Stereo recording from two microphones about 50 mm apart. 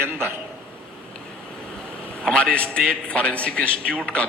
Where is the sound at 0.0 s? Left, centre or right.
Right.